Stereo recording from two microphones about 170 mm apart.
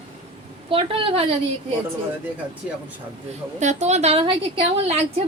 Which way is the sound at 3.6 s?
40° right (ahead or behind).